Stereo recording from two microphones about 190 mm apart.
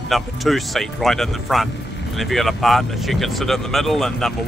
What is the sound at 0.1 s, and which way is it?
Speech, centre (ahead or behind).